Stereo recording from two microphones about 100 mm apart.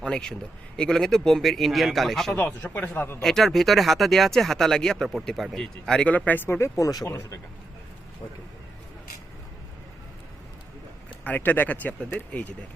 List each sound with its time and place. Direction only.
0.0 s a man's voice: 5° left (ahead or behind)
2.3 s speech: 20° left (ahead or behind)
3.2 s speech: 5° left (ahead or behind); by 7.3 s 30° left (ahead or behind)
11.2 s speech: 15° left (ahead or behind)